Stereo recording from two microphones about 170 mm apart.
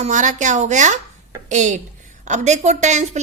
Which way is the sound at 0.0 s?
45° right (ahead or behind).